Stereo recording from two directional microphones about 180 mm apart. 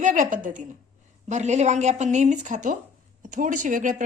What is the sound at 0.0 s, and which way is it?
Speech, 45° right (ahead or behind).